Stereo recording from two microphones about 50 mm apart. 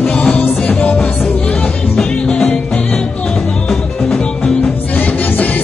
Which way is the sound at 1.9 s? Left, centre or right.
Centre.